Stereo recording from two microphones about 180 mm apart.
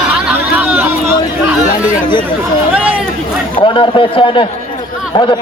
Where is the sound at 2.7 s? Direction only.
5° right (ahead or behind).